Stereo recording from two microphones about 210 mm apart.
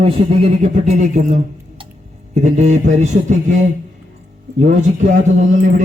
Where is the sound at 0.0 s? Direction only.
30° right (ahead or behind).